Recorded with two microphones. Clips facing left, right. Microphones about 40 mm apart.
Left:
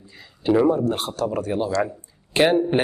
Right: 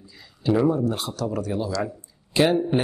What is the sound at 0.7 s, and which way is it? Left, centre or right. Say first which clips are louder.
Speech: left 2 dB; left.